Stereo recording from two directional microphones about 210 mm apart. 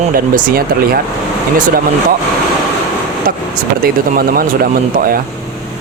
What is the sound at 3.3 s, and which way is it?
Speech, 40° right (ahead or behind).